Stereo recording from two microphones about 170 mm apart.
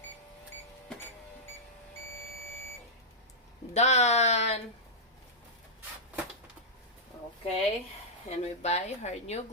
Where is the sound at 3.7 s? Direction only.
40° left (ahead or behind).